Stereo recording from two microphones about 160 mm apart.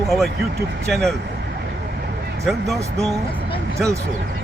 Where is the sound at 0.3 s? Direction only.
90° right.